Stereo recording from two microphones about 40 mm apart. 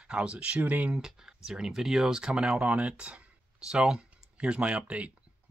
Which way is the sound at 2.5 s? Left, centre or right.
Right.